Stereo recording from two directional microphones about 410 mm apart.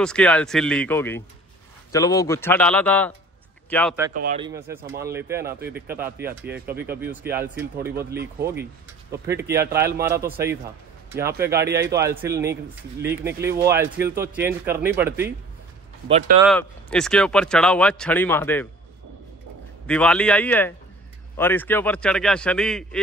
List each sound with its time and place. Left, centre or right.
0.0 s speech: centre
4.1 s a man's voice: centre
4.6 s speech: centre
5.5 s a man's voice: right
5.9 s speech: centre
6.1 s a man's voice: right
7.3 s speech: centre
8.4 s a man's voice: right
9.3 s speech: centre
16.4 s speech: centre
19.9 s speech: centre